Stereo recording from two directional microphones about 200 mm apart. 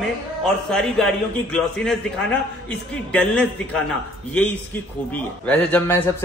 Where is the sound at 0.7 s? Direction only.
5° left (ahead or behind).